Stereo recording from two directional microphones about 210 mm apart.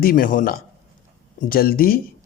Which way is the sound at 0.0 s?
40° left (ahead or behind).